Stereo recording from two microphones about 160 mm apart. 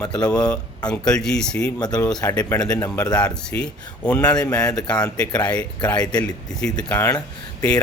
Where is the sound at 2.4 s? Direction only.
25° left (ahead or behind).